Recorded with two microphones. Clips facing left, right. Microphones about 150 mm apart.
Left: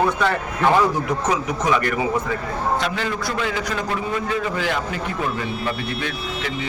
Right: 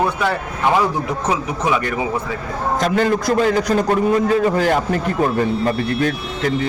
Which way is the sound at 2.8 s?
45° right (ahead or behind).